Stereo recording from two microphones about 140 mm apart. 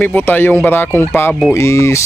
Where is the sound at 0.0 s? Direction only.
10° left (ahead or behind).